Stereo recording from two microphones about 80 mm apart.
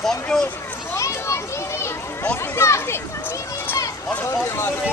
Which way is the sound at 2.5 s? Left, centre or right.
Left.